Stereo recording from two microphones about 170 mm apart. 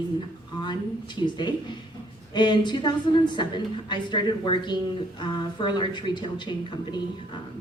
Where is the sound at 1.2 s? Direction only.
25° left (ahead or behind).